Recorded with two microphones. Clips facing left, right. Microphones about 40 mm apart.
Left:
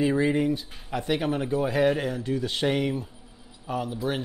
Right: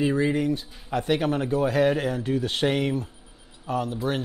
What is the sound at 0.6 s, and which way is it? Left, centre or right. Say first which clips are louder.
Speech: right 3 dB; centre.